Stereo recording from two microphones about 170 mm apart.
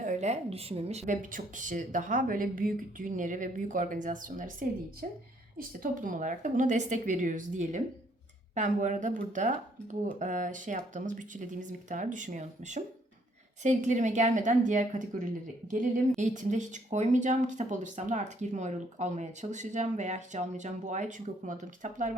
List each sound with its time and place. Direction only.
0.0 s a woman's voice: 45° right (ahead or behind)
5.5 s a woman's voice: 55° right (ahead or behind)